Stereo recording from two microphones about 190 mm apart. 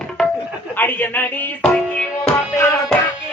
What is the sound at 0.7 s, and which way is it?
Speech, 10° left (ahead or behind).